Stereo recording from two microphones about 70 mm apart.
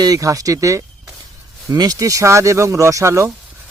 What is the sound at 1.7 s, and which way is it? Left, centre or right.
Speech, right.